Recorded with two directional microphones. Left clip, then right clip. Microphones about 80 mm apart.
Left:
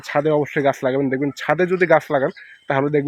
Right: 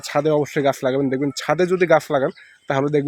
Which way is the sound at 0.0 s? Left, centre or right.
Right.